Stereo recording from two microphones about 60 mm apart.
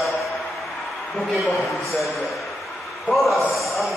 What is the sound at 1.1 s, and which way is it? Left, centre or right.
A man's voice, centre.